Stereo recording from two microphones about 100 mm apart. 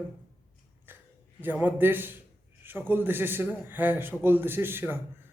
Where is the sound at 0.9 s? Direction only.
20° right (ahead or behind).